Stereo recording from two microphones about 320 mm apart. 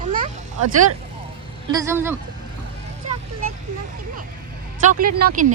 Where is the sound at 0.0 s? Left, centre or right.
Right.